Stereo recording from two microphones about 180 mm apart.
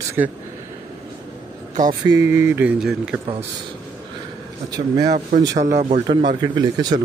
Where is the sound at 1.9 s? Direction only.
20° right (ahead or behind).